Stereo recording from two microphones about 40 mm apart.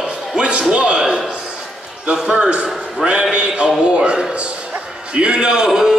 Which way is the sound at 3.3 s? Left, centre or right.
Right.